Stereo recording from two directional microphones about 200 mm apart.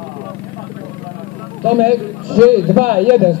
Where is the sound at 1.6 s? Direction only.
40° right (ahead or behind).